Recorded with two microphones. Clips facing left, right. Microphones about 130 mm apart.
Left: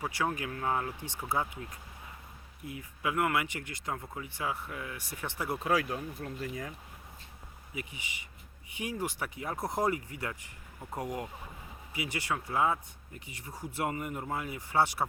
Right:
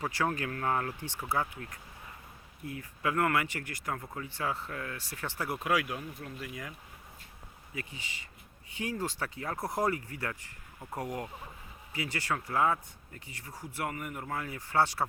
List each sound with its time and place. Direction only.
0.0 s speech: 15° left (ahead or behind)
5.6 s speech: 35° left (ahead or behind)
7.8 s speech: 15° left (ahead or behind)